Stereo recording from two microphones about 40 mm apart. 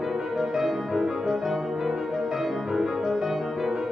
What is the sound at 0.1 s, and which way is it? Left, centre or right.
Music, centre.